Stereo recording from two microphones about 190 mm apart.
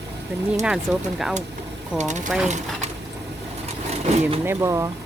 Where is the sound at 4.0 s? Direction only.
35° right (ahead or behind).